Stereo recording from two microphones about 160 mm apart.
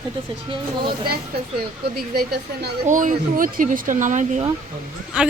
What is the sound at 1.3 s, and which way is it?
Speech, 75° right (ahead or behind).